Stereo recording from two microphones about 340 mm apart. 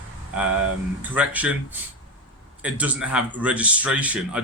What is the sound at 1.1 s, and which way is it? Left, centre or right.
Speech, centre.